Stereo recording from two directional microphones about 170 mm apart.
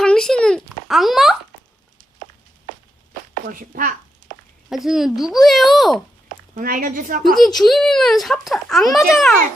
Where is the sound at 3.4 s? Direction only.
55° right (ahead or behind).